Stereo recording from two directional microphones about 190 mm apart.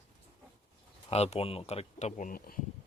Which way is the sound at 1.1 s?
35° left (ahead or behind).